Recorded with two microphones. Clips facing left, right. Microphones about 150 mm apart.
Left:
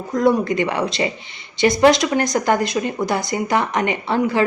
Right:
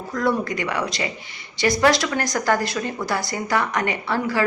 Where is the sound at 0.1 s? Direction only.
20° left (ahead or behind).